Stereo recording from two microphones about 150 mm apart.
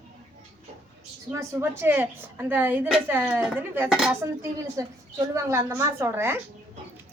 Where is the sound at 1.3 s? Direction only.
15° right (ahead or behind).